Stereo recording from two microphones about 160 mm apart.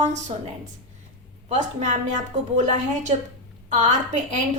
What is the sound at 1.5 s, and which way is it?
A woman's voice, 45° right (ahead or behind).